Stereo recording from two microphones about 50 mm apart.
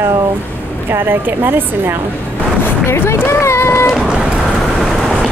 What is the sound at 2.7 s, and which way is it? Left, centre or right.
Speech, left.